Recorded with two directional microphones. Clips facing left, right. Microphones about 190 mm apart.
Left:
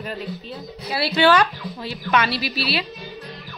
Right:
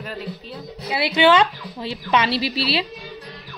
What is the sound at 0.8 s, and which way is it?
A woman's voice, 15° right (ahead or behind).